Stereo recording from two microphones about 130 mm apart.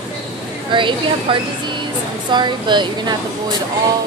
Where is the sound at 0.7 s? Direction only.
40° right (ahead or behind).